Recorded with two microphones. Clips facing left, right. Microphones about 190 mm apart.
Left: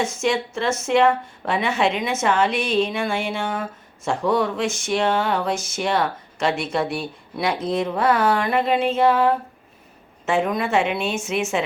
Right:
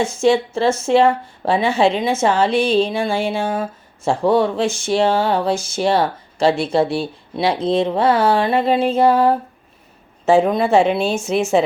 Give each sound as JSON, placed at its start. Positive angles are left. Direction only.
{"t": 0.0, "sound": "a woman's voice", "side_deg": -30}